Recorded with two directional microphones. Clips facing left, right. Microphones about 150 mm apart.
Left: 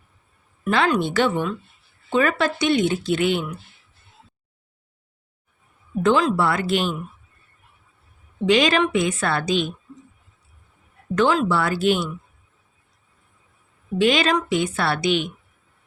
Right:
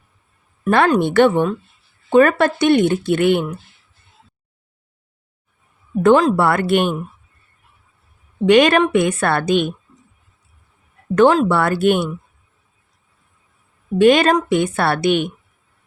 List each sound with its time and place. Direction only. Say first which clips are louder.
0.7 s speech: right 5 dB; 50° right (ahead or behind)
6.0 s speech: right 6 dB; 50° right (ahead or behind)
8.4 s speech: right 6 dB; 60° right (ahead or behind)
11.1 s speech: right 6 dB; 50° right (ahead or behind)
14.0 s a woman's voice: right 7 dB; 55° right (ahead or behind)